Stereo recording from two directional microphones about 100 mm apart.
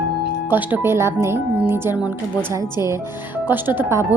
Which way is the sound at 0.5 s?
20° right (ahead or behind).